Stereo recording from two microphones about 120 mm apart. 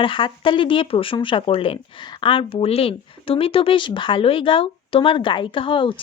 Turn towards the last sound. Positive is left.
turn(degrees=45)  # may be behind; listen again after turning